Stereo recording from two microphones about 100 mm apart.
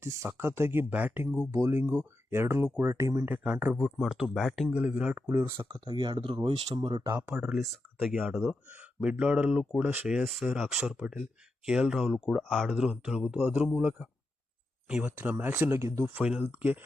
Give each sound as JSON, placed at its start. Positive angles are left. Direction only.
{"t": 0.0, "sound": "speech", "side_deg": -30}
{"t": 1.5, "sound": "speech", "side_deg": -30}
{"t": 3.2, "sound": "speech", "side_deg": -15}
{"t": 3.8, "sound": "speech", "side_deg": -5}
{"t": 4.7, "sound": "speech", "side_deg": -15}
{"t": 5.3, "sound": "speech", "side_deg": -25}
{"t": 5.7, "sound": "speech", "side_deg": -45}
{"t": 7.5, "sound": "speech", "side_deg": 0}
{"t": 10.2, "sound": "speech", "side_deg": 0}
{"t": 12.4, "sound": "speech", "side_deg": 5}
{"t": 12.7, "sound": "speech", "side_deg": -5}
{"t": 15.8, "sound": "speech", "side_deg": -30}
{"t": 16.1, "sound": "speech", "side_deg": -15}